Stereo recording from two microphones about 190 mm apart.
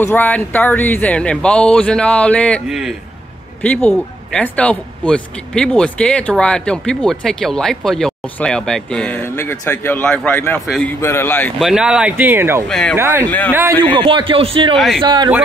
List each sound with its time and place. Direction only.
0.0 s speech: 10° left (ahead or behind)
11.6 s speech: 5° right (ahead or behind)
12.6 s speech: centre (ahead or behind)
13.5 s speech: 10° right (ahead or behind)
13.9 s a man's voice: 25° right (ahead or behind)